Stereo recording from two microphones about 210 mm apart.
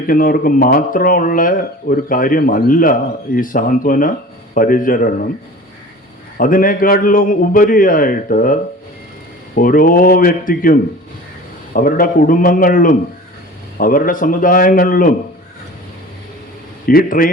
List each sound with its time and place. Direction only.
0.1 s speech: 40° left (ahead or behind)
6.3 s speech: 40° left (ahead or behind)
9.6 s speech: 40° left (ahead or behind)
16.8 s a man's voice: 45° left (ahead or behind)